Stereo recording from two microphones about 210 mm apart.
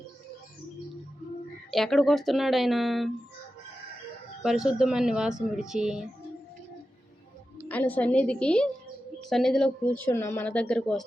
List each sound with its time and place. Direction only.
1.7 s speech: centre (ahead or behind)
4.4 s speech: centre (ahead or behind)
7.7 s a woman's voice: 5° left (ahead or behind)